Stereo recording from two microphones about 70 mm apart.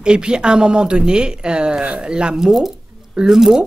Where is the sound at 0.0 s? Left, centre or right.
Centre.